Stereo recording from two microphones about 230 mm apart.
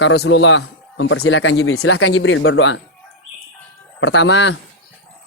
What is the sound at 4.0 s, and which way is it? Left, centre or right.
Speech, left.